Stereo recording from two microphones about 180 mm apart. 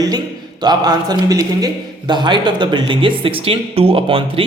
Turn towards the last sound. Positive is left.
turn(degrees=-30)  # may be behind; listen again after turning